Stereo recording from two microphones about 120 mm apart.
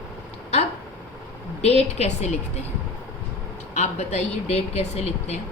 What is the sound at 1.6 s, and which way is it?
Speech, 60° left (ahead or behind).